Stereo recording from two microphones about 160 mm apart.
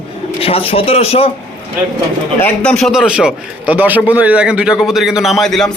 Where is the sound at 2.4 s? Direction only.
5° left (ahead or behind).